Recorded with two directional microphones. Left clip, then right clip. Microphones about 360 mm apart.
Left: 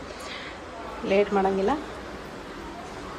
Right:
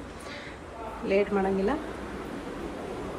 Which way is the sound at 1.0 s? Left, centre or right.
Centre.